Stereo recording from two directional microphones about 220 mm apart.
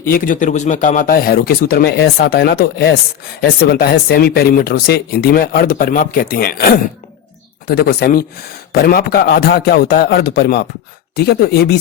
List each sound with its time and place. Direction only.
0.0 s speech: 40° left (ahead or behind)